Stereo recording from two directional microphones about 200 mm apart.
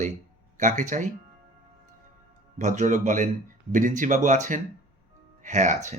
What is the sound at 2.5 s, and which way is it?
Speech, 40° right (ahead or behind).